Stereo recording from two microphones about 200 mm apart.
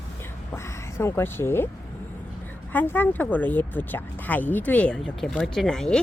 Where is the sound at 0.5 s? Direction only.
15° left (ahead or behind).